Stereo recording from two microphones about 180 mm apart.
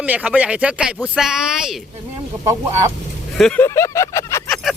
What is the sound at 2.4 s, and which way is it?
Speech, 15° right (ahead or behind).